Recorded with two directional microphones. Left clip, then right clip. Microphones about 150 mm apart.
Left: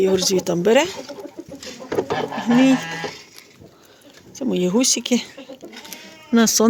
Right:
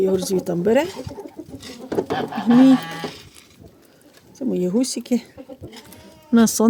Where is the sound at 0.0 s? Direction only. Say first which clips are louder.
Left 2 dB; 15° right (ahead or behind).